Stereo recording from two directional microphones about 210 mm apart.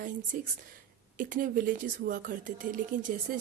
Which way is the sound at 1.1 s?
40° right (ahead or behind).